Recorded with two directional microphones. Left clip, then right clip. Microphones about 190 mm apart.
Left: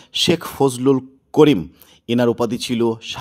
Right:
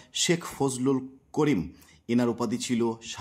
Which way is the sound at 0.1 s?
35° left (ahead or behind).